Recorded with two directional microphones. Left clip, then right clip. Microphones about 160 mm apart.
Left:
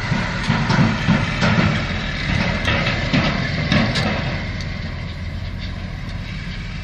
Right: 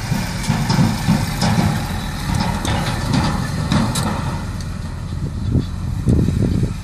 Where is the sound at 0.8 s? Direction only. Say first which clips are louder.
Left 1 dB; 15° right (ahead or behind).